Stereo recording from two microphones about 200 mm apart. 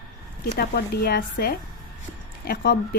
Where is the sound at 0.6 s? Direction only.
50° left (ahead or behind).